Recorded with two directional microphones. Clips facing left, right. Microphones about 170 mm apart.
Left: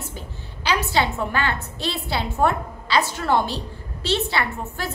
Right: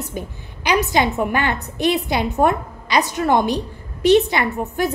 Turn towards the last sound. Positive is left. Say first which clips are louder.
# right 6 dB
turn(degrees=-15)  # may be behind; listen again after turning